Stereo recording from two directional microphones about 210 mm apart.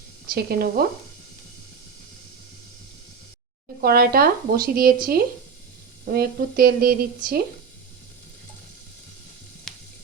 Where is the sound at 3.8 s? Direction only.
45° right (ahead or behind).